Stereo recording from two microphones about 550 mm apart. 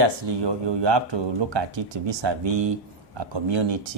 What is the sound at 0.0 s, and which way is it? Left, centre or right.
Speech, right.